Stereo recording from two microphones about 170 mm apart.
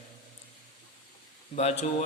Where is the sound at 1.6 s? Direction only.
40° left (ahead or behind).